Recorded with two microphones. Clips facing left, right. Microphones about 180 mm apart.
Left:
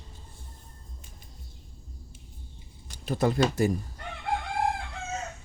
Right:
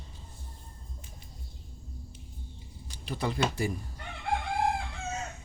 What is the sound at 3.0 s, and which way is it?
Speech, 45° left (ahead or behind).